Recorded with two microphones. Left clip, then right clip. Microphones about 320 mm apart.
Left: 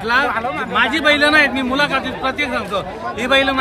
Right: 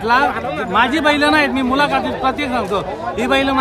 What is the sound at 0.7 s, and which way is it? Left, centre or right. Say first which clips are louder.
Speech: even; centre.